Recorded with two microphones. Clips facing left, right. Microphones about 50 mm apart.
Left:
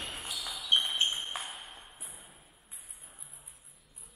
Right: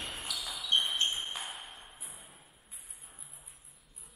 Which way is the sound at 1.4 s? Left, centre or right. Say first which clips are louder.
Even; centre.